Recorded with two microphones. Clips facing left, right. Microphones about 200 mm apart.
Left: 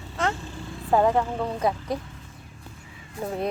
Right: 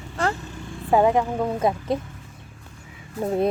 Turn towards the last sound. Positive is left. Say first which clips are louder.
# right 6 dB
turn(degrees=-30)  # may be behind; listen again after turning